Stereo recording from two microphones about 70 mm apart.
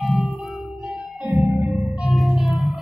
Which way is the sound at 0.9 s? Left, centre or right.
Centre.